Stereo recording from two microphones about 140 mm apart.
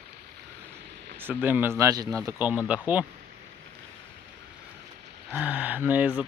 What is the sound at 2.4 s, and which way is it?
Speech, 10° right (ahead or behind).